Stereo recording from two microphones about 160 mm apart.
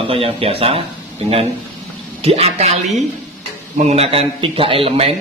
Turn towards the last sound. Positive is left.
turn(degrees=-40)  # may be behind; listen again after turning